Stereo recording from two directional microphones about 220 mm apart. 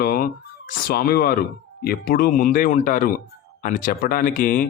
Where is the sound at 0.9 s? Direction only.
45° left (ahead or behind).